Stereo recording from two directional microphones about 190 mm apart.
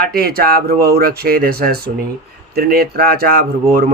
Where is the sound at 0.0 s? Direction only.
55° right (ahead or behind).